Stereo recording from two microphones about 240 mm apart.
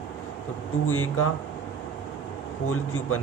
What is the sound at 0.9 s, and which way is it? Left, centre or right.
Speech, left.